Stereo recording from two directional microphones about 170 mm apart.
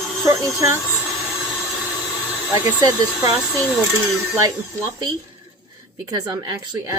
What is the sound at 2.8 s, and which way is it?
Speech, 20° right (ahead or behind).